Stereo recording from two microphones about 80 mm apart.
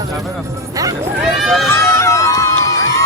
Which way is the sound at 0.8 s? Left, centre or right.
Right.